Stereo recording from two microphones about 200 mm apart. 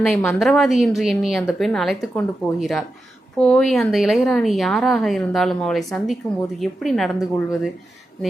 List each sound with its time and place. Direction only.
0.1 s speech: 10° left (ahead or behind)